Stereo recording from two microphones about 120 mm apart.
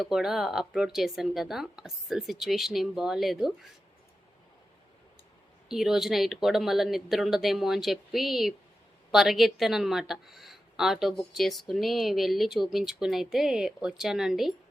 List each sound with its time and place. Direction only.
0.0 s speech: 5° right (ahead or behind)
5.6 s speech: 5° right (ahead or behind)